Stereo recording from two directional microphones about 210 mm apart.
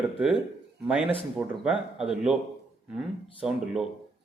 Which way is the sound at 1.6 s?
5° right (ahead or behind).